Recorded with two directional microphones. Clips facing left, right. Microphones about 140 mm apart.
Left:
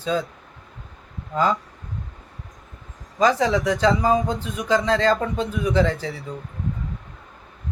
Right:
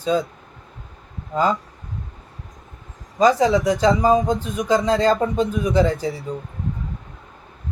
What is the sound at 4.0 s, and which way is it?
Speech, 35° right (ahead or behind).